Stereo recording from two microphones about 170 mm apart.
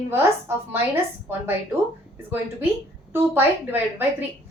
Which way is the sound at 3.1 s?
10° right (ahead or behind).